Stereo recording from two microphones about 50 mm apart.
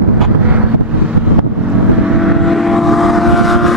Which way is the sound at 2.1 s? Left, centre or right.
Centre.